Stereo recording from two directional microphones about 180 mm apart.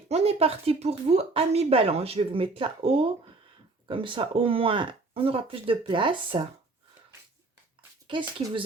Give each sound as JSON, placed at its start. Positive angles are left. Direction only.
{"t": 0.1, "sound": "speech", "side_deg": -35}
{"t": 8.0, "sound": "speech", "side_deg": -25}